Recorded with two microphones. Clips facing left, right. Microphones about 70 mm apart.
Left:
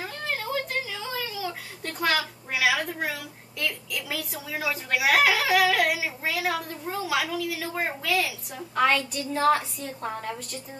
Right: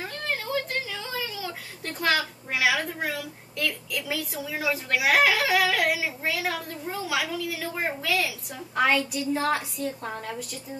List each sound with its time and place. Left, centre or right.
0.0 s a woman's voice: centre